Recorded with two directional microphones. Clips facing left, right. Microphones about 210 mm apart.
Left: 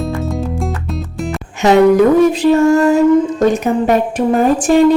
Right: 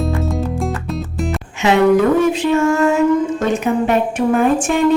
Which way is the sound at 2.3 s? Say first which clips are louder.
Left 5 dB; 35° left (ahead or behind).